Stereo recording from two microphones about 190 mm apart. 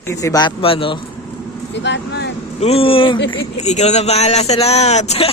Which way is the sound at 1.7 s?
65° left (ahead or behind).